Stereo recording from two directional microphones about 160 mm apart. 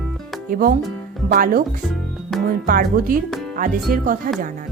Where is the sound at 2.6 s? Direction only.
65° right (ahead or behind).